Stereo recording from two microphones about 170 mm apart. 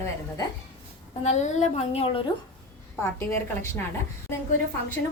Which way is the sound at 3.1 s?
15° left (ahead or behind).